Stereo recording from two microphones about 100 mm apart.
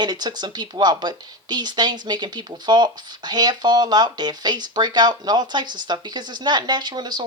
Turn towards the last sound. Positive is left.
turn(degrees=-45)  # may be behind; listen again after turning